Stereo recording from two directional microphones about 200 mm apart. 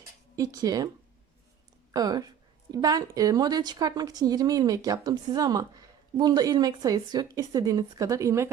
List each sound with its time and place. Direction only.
0.3 s speech: 20° right (ahead or behind)
1.9 s a woman's voice: 20° right (ahead or behind)